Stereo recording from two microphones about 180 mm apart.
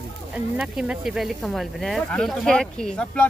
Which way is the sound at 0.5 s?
5° right (ahead or behind).